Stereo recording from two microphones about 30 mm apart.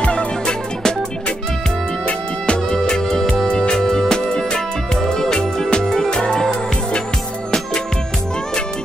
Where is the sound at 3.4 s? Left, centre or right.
Left.